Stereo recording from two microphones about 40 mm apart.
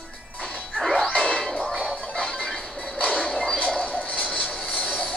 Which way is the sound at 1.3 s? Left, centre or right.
Left.